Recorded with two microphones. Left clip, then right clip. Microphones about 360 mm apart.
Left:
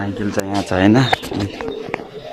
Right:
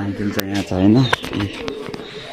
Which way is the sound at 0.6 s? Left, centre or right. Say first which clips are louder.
Left 2 dB; left.